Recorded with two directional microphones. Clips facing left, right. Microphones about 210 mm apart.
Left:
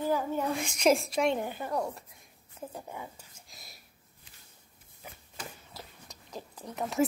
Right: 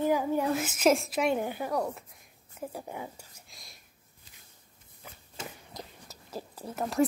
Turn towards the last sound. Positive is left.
turn(degrees=-5)  # may be behind; listen again after turning